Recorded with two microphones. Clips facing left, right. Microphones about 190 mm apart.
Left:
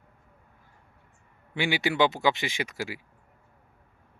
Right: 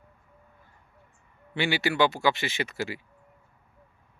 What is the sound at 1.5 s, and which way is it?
Speech, 15° left (ahead or behind).